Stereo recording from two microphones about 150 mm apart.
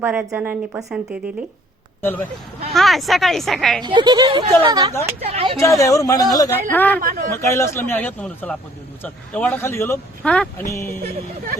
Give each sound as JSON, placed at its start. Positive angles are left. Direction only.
{"t": 0.0, "sound": "speech", "side_deg": -10}
{"t": 2.0, "sound": "speech", "side_deg": 15}
{"t": 2.7, "sound": "a woman's voice", "side_deg": 0}
{"t": 3.8, "sound": "speech", "side_deg": -30}
{"t": 5.2, "sound": "speech", "side_deg": -40}
{"t": 5.5, "sound": "speech", "side_deg": 20}
{"t": 6.7, "sound": "speech", "side_deg": 10}
{"t": 7.0, "sound": "a man's voice", "side_deg": -75}
{"t": 7.3, "sound": "speech", "side_deg": 20}
{"t": 10.6, "sound": "speech", "side_deg": 20}